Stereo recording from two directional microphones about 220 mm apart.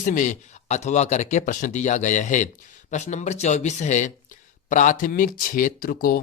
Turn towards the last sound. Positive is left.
turn(degrees=40)  # may be behind; listen again after turning